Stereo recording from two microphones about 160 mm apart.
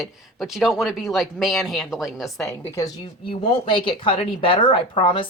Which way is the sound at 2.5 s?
20° left (ahead or behind).